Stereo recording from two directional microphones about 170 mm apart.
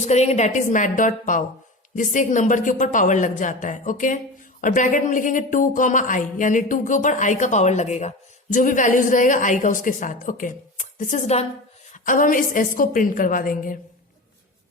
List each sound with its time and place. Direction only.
0.0 s speech: 40° left (ahead or behind)